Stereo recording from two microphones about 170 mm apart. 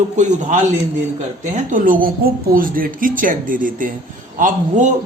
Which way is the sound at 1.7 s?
50° right (ahead or behind).